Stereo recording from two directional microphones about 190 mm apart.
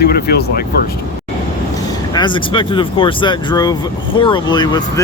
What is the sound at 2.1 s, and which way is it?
Speech, 25° left (ahead or behind).